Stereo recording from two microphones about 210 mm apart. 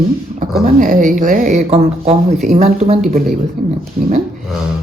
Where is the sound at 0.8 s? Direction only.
40° right (ahead or behind).